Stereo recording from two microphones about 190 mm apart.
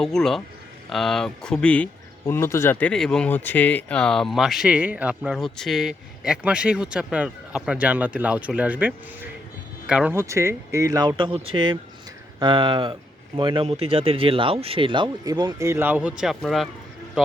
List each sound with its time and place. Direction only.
0.0 s speech: centre (ahead or behind)